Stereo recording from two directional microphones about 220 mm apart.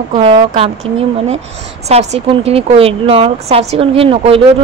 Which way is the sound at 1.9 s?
30° right (ahead or behind).